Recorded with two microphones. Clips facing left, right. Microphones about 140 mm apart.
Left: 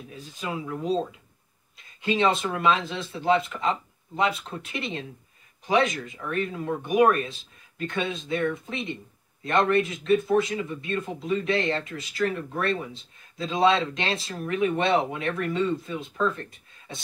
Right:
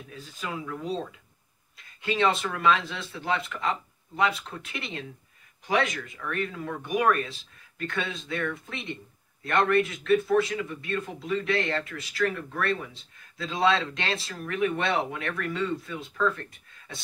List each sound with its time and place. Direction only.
0.1 s a man's voice: 20° left (ahead or behind)